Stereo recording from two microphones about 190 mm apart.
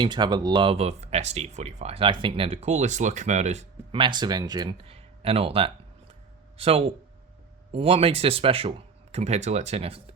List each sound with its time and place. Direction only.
0.0 s speech: 25° right (ahead or behind)